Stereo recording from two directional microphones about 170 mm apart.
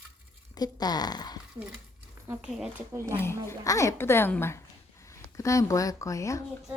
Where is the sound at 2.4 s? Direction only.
5° right (ahead or behind).